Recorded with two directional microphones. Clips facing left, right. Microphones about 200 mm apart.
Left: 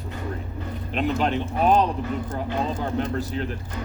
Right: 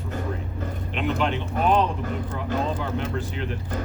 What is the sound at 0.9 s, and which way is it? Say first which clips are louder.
Speech: left 2 dB; 40° left (ahead or behind).